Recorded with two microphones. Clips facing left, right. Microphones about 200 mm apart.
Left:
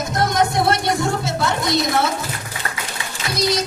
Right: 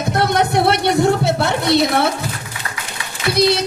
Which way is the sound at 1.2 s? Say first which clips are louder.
Right 4 dB; 65° right (ahead or behind).